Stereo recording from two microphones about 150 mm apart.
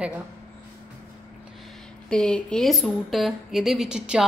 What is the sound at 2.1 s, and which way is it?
A woman's voice, 5° left (ahead or behind).